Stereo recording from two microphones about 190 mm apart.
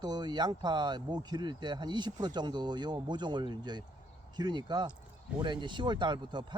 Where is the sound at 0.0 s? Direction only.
20° right (ahead or behind).